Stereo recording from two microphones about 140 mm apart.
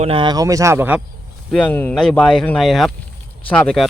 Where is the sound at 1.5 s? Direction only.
10° left (ahead or behind).